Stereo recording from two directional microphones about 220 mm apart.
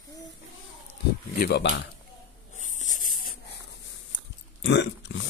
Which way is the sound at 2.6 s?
35° left (ahead or behind).